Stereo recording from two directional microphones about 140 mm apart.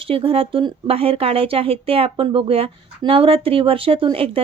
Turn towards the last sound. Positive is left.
turn(degrees=-40)  # may be behind; listen again after turning